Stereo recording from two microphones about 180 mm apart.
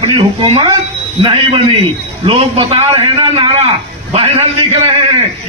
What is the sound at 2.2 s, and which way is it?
A man's voice, 35° right (ahead or behind).